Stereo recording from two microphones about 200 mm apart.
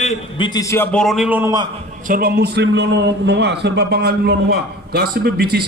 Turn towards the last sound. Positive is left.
turn(degrees=-50)  # may be behind; listen again after turning